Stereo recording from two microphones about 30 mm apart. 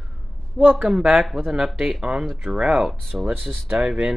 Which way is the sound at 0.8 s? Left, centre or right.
Right.